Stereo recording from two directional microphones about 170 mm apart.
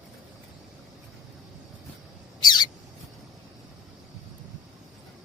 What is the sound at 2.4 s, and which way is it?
Squawk, 25° left (ahead or behind).